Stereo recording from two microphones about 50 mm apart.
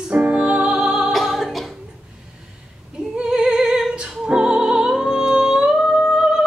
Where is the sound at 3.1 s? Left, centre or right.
Centre.